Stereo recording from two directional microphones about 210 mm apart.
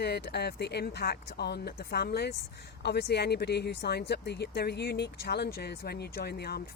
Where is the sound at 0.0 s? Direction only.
50° left (ahead or behind).